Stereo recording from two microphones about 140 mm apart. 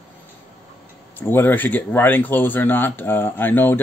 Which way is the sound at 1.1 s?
15° left (ahead or behind).